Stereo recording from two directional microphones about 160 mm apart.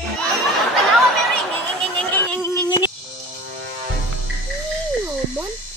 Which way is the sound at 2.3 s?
15° left (ahead or behind).